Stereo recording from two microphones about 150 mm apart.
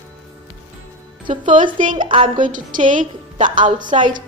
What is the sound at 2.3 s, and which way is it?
A woman's voice, 60° right (ahead or behind).